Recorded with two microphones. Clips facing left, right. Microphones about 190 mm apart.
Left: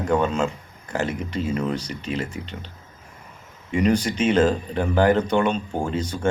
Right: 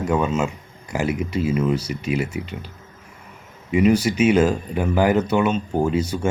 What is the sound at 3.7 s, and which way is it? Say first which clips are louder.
A man's voice: right 3 dB; 5° right (ahead or behind).